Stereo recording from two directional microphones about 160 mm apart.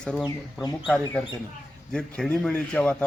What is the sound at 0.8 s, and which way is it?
Speech, 10° left (ahead or behind).